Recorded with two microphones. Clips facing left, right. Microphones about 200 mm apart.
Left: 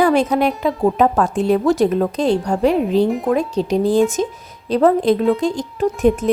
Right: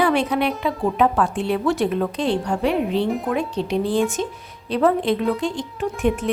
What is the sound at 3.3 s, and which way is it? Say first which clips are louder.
Speech: left 5 dB; 40° left (ahead or behind).